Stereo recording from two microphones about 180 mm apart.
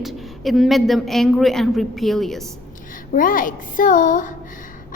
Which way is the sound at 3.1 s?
50° left (ahead or behind).